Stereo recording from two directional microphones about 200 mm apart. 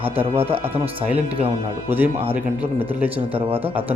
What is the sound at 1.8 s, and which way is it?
Speech, 10° right (ahead or behind).